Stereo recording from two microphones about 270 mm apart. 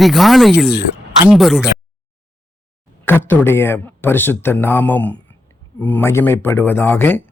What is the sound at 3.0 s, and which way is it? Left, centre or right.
Speech, centre.